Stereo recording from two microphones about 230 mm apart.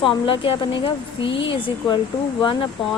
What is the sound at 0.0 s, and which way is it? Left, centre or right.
A woman's voice, left.